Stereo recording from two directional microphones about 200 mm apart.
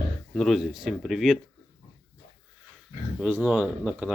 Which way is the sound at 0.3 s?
Centre (ahead or behind).